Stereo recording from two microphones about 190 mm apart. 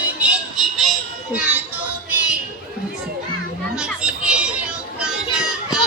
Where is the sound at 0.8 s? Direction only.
5° right (ahead or behind).